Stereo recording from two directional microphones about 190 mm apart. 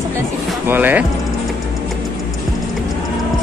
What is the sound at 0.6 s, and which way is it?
Speech, 10° right (ahead or behind).